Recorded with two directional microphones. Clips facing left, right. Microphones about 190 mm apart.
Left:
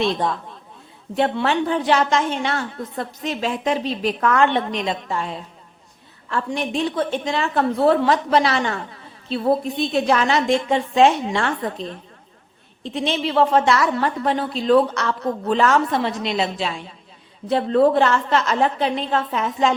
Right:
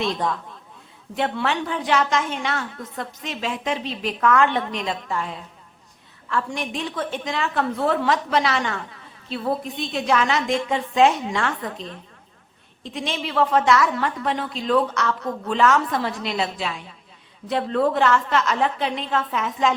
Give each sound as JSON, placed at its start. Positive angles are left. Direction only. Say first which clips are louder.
{"t": 0.0, "sound": "a woman's voice", "louder": "left 3 dB", "side_deg": 30}